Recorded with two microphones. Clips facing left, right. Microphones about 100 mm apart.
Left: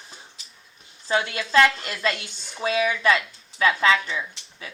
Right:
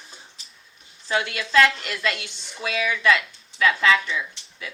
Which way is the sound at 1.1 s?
30° left (ahead or behind).